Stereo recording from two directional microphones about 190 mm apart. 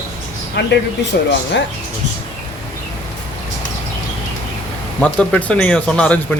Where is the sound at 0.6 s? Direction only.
65° left (ahead or behind).